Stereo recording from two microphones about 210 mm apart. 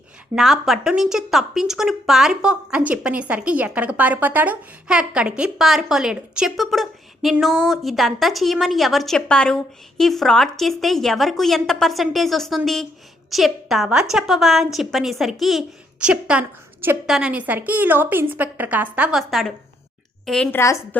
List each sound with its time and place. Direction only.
0.3 s a woman's voice: centre (ahead or behind)